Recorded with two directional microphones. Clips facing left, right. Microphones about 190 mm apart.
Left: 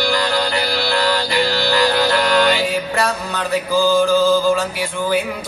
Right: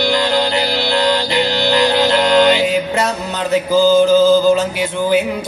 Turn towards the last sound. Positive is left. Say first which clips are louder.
# right 4 dB
turn(degrees=-20)  # may be behind; listen again after turning